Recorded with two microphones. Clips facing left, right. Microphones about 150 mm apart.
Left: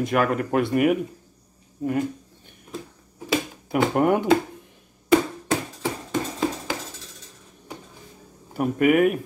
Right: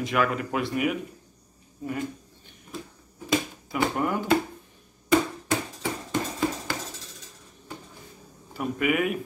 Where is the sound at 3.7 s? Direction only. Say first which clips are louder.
Left 6 dB; 60° left (ahead or behind).